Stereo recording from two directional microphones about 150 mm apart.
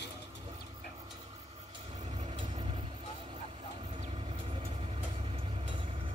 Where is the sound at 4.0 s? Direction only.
40° right (ahead or behind).